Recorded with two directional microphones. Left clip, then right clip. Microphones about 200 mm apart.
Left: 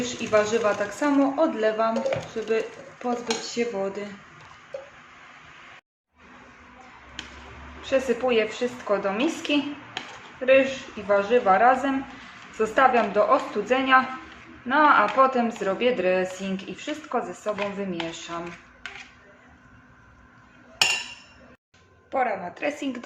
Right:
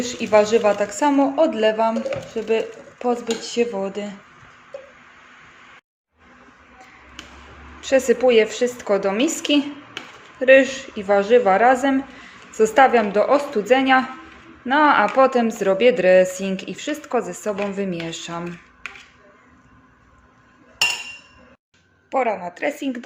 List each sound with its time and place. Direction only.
0.0 s a woman's voice: 30° right (ahead or behind)
7.8 s speech: 40° right (ahead or behind)
22.1 s speech: 35° right (ahead or behind)